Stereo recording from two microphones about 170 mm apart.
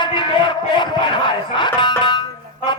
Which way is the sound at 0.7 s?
25° left (ahead or behind).